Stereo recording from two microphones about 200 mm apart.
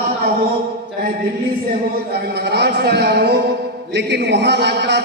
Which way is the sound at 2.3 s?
55° right (ahead or behind).